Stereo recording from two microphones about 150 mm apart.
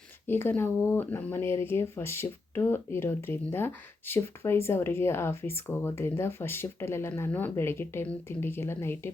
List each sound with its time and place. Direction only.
0.3 s speech: 15° left (ahead or behind)